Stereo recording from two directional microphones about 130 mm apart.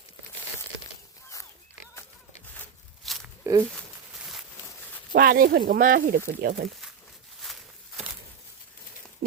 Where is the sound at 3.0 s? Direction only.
Centre (ahead or behind).